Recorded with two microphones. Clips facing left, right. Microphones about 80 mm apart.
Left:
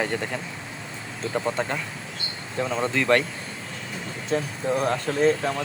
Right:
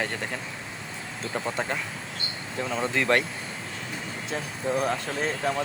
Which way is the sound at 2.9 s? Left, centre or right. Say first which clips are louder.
Left 3 dB; centre.